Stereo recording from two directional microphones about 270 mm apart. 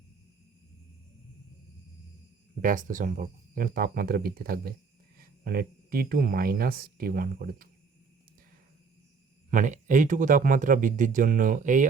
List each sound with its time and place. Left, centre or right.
2.6 s speech: right
9.5 s speech: right